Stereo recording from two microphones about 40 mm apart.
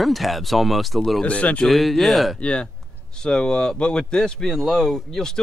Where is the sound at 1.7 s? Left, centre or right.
Centre.